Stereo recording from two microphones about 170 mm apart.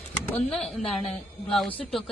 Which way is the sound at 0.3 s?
5° left (ahead or behind).